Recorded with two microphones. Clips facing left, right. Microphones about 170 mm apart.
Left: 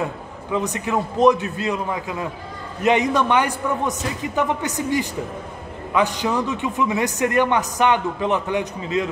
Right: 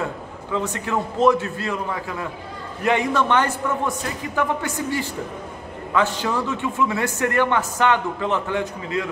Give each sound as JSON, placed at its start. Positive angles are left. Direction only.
{"t": 0.0, "sound": "a man's voice", "side_deg": 15}